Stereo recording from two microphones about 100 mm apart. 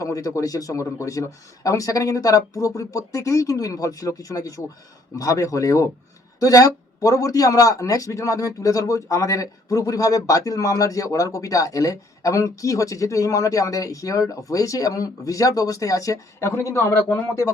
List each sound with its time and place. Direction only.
0.0 s a man's voice: 35° left (ahead or behind)